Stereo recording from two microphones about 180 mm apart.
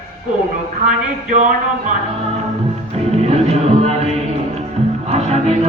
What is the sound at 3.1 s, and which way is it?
Music, 35° right (ahead or behind).